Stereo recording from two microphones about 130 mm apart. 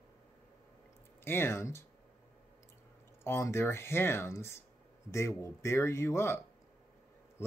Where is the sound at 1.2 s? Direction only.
20° left (ahead or behind).